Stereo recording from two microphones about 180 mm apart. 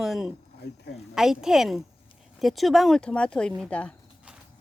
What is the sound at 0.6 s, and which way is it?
Speech, 65° left (ahead or behind).